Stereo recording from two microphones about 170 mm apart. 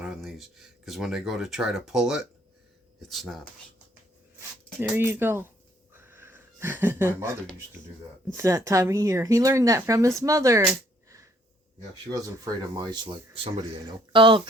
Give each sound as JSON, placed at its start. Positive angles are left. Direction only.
{"t": 0.0, "sound": "speech", "side_deg": -5}
{"t": 4.8, "sound": "speech", "side_deg": -10}
{"t": 5.9, "sound": "a sound", "side_deg": -15}
{"t": 8.4, "sound": "speech", "side_deg": -20}
{"t": 12.7, "sound": "speech", "side_deg": -25}